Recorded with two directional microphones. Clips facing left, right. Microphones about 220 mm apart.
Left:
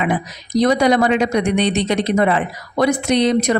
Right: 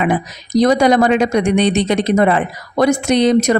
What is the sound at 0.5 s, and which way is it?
Speech, 45° right (ahead or behind).